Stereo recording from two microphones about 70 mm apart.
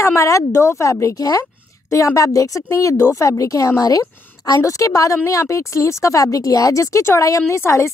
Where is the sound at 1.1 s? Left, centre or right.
Left.